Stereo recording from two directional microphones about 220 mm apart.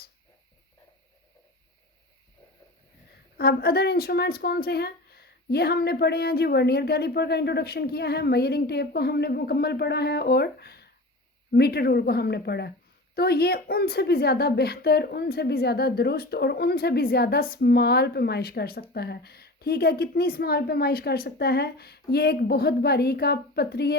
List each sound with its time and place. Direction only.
3.3 s a woman's voice: 45° left (ahead or behind)